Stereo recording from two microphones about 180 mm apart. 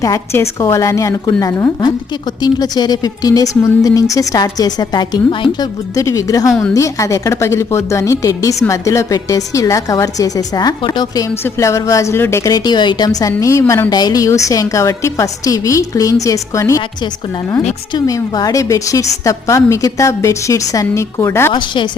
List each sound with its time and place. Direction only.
0.0 s a woman's voice: 15° left (ahead or behind)
6.5 s a woman's voice: 5° left (ahead or behind)
6.7 s a woman's voice: 15° left (ahead or behind)
17.9 s a woman's voice: 20° left (ahead or behind)